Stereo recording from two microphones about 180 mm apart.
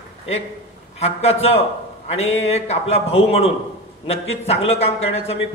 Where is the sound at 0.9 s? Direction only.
35° left (ahead or behind).